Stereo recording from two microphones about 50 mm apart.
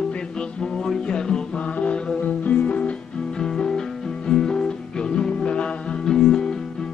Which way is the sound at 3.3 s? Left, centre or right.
Centre.